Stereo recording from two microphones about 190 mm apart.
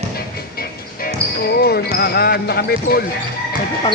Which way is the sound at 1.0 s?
55° left (ahead or behind).